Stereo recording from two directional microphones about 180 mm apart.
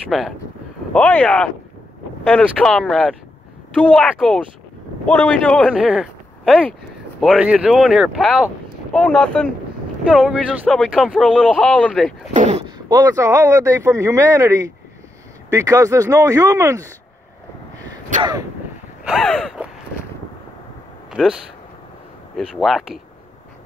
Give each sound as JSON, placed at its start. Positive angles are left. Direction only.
{"t": 0.1, "sound": "speech", "side_deg": 0}
{"t": 5.7, "sound": "speech", "side_deg": -5}
{"t": 10.1, "sound": "speech", "side_deg": -5}
{"t": 12.4, "sound": "speech", "side_deg": -35}
{"t": 12.6, "sound": "speech", "side_deg": -20}
{"t": 19.0, "sound": "speech", "side_deg": 5}
{"t": 21.1, "sound": "speech", "side_deg": -5}
{"t": 22.6, "sound": "speech", "side_deg": 0}